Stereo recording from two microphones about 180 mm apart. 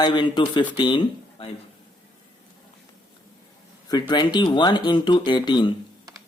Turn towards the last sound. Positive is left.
turn(degrees=25)  # may be behind; listen again after turning